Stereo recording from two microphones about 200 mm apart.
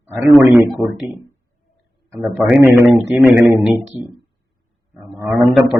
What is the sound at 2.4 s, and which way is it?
A man's voice, 10° right (ahead or behind).